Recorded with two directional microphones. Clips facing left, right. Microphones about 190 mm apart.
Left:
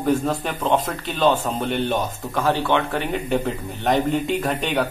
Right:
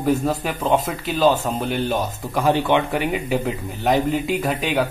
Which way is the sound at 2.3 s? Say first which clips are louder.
Right 2 dB; 15° right (ahead or behind).